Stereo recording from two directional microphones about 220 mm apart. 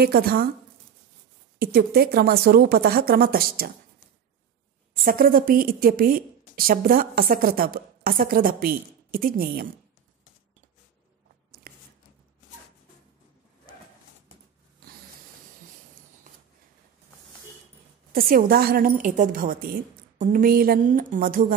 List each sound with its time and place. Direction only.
0.0 s speech: 45° right (ahead or behind)
1.6 s speech: 45° right (ahead or behind)
5.0 s a woman's voice: 40° right (ahead or behind)
11.7 s a sound: 45° right (ahead or behind)
18.1 s a woman's voice: 40° right (ahead or behind)